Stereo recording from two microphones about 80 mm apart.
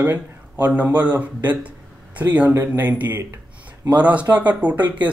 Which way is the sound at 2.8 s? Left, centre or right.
Right.